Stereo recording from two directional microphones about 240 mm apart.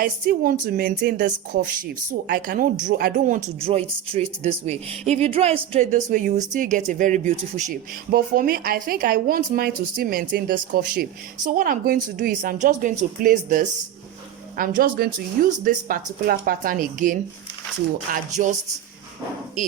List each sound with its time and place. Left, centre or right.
0.0 s a woman's voice: right